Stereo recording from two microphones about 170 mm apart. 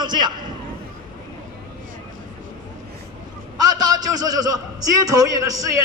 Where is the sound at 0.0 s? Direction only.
25° right (ahead or behind).